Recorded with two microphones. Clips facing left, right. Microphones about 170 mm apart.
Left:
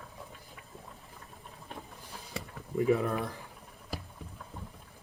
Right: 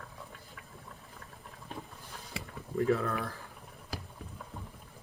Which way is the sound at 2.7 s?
15° left (ahead or behind).